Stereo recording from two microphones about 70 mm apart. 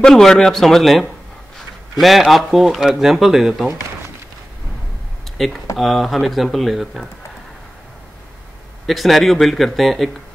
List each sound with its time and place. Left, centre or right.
0.0 s speech: centre
5.8 s speech: centre
8.8 s speech: centre